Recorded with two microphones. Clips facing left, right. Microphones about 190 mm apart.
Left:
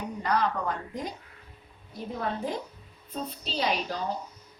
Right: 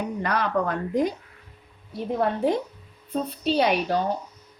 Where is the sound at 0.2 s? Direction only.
65° right (ahead or behind).